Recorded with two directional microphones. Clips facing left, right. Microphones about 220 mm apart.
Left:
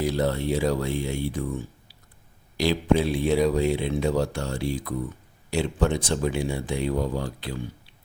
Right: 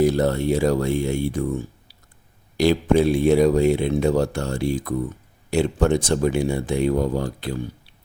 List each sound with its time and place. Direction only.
0.0 s speech: 45° right (ahead or behind)
2.6 s speech: 45° right (ahead or behind)